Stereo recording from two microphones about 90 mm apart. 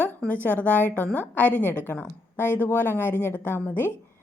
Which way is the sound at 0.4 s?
20° left (ahead or behind).